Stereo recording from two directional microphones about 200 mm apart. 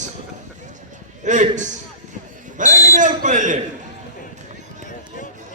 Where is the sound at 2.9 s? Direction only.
40° right (ahead or behind).